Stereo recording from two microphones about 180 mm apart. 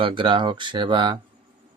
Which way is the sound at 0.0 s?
30° right (ahead or behind).